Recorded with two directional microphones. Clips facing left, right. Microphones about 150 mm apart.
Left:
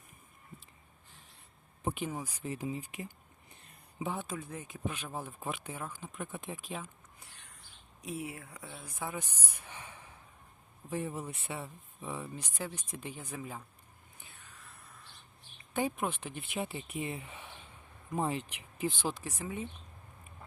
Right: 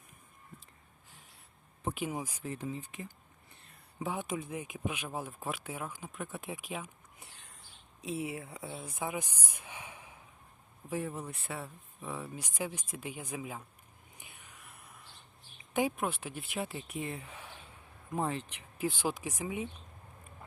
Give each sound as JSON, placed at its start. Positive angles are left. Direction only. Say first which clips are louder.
{"t": 1.8, "sound": "speech", "louder": "left 1 dB", "side_deg": 0}
{"t": 2.0, "sound": "speech", "louder": "right 2 dB", "side_deg": -10}
{"t": 2.4, "sound": "speech", "louder": "left 1 dB", "side_deg": 5}
{"t": 4.1, "sound": "speech", "louder": "right 5 dB", "side_deg": -20}
{"t": 7.2, "sound": "a sound", "louder": "right 3 dB", "side_deg": -25}
{"t": 8.0, "sound": "speech", "louder": "right 3 dB", "side_deg": -25}
{"t": 9.6, "sound": "snort", "louder": "right 2 dB", "side_deg": -10}
{"t": 10.8, "sound": "speech", "louder": "even", "side_deg": 0}
{"t": 12.4, "sound": "speech", "louder": "right 2 dB", "side_deg": -15}
{"t": 14.2, "sound": "whispering", "louder": "right 1 dB", "side_deg": -15}
{"t": 16.0, "sound": "speech", "louder": "even", "side_deg": -5}
{"t": 18.8, "sound": "speech", "louder": "right 1 dB", "side_deg": -10}